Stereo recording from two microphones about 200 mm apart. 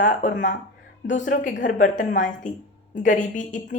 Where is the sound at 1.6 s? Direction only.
40° left (ahead or behind).